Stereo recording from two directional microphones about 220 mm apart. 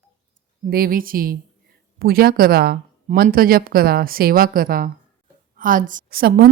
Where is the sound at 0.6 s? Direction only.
40° right (ahead or behind).